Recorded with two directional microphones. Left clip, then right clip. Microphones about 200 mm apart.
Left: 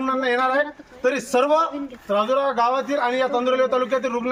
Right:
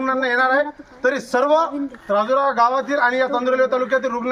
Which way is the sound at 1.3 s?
Centre (ahead or behind).